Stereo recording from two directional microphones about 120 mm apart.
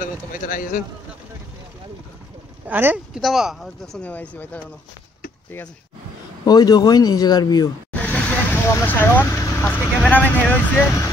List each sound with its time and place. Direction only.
0.4 s speech: 90° left
2.7 s speech: 15° right (ahead or behind)
3.2 s speech: centre (ahead or behind)
4.1 s speech: 15° left (ahead or behind)
6.4 s a man's voice: 30° left (ahead or behind)
7.9 s speech: 15° left (ahead or behind)